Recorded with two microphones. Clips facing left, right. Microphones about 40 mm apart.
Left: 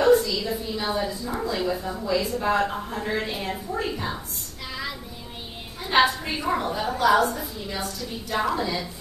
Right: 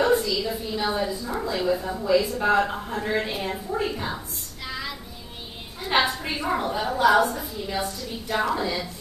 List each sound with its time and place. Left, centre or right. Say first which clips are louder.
0.0 s a sound: left 2 dB; centre
1.6 s a woman's voice: right 2 dB; centre
5.9 s a woman's voice: left 2 dB; centre